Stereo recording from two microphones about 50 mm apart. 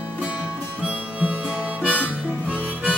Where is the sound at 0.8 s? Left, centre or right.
Right.